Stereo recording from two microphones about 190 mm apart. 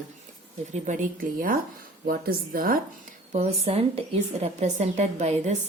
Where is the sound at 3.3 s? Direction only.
35° right (ahead or behind).